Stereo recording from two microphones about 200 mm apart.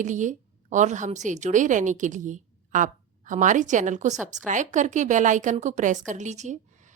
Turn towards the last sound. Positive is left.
turn(degrees=-40)  # may be behind; listen again after turning